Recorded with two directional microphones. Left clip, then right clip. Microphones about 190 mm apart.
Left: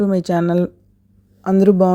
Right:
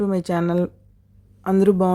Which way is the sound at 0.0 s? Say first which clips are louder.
Left 4 dB; 15° left (ahead or behind).